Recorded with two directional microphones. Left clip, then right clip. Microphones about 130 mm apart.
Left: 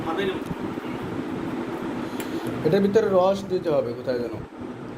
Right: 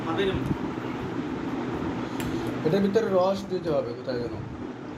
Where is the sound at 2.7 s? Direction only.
35° left (ahead or behind).